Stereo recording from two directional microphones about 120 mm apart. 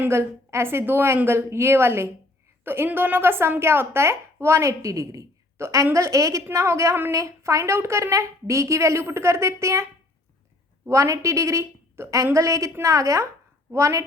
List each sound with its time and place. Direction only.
0.0 s a woman's voice: 20° right (ahead or behind)
10.8 s a woman's voice: 25° right (ahead or behind)